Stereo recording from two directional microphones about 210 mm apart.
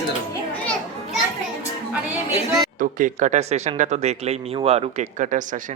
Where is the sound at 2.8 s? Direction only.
40° right (ahead or behind).